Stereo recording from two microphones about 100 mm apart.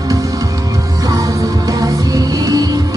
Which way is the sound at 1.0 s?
35° right (ahead or behind).